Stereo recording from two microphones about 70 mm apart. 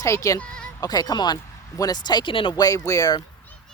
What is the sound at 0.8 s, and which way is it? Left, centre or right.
Speech, left.